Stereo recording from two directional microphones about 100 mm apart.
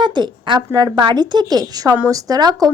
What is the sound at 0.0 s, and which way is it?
Speech, 50° right (ahead or behind).